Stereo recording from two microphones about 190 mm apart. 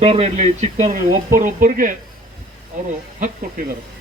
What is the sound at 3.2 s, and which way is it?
Speech, 45° right (ahead or behind).